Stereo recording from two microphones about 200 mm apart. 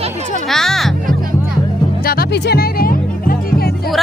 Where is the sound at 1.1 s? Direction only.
45° right (ahead or behind).